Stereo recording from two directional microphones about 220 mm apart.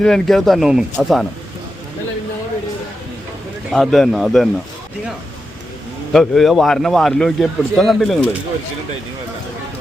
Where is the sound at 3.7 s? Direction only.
Centre (ahead or behind).